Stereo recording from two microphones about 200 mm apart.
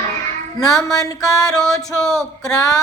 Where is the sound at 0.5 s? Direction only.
15° left (ahead or behind).